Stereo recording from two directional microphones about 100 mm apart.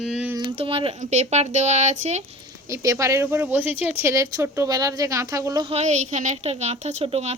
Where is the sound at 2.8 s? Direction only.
30° right (ahead or behind).